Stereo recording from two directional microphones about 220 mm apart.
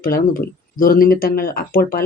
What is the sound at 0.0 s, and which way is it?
Speech, 40° left (ahead or behind).